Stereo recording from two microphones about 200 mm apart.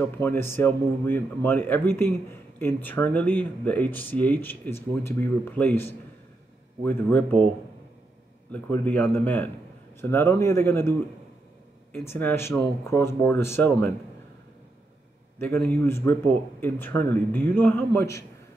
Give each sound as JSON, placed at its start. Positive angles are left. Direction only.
{"t": 0.2, "sound": "speech", "side_deg": 10}
{"t": 8.5, "sound": "speech", "side_deg": 10}
{"t": 12.1, "sound": "speech", "side_deg": 10}
{"t": 15.3, "sound": "speech", "side_deg": 10}